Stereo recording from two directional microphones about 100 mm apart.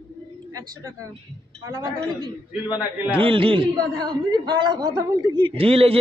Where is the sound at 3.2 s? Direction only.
60° right (ahead or behind).